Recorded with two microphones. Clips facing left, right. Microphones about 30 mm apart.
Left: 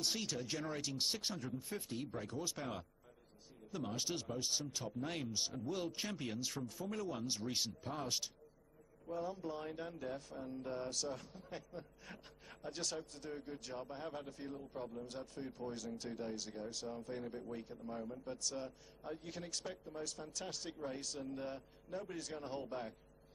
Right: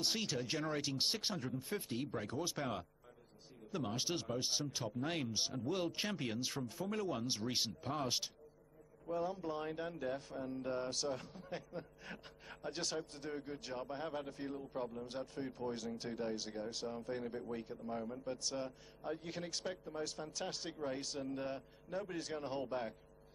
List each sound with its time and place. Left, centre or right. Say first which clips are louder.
0.0 s speech: right 2 dB; centre
9.0 s speech: right 3 dB; centre